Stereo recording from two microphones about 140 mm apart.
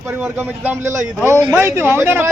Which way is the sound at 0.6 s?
20° right (ahead or behind).